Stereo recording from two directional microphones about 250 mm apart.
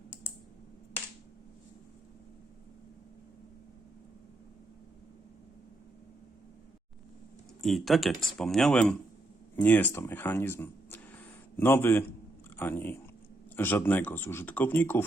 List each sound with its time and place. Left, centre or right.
7.6 s speech: centre